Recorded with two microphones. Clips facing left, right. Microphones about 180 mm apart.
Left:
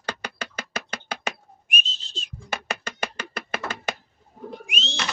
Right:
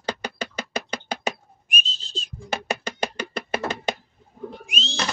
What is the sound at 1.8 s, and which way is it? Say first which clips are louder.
Whistle: right 3 dB; 35° right (ahead or behind).